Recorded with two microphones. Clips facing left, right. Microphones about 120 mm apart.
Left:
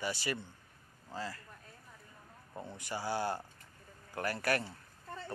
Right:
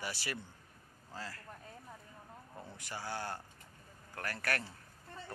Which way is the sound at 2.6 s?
Centre (ahead or behind).